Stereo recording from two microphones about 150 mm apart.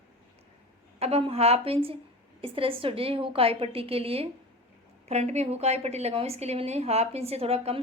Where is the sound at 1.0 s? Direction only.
45° right (ahead or behind).